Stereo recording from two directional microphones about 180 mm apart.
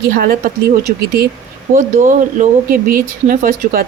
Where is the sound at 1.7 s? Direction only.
45° right (ahead or behind).